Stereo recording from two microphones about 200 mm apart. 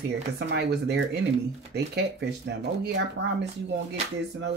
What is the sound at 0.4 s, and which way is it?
Speech, 55° right (ahead or behind).